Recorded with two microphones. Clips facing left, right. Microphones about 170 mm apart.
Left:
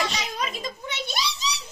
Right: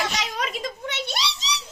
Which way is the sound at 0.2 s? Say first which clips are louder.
Right 2 dB; 80° right.